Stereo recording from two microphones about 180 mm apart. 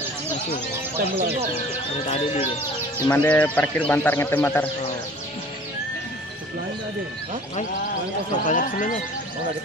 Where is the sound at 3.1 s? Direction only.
10° left (ahead or behind).